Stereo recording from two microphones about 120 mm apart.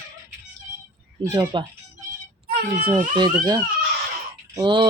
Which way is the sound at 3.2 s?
35° right (ahead or behind).